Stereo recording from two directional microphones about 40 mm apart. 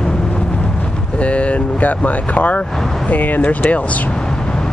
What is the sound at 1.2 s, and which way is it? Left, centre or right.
Speech, left.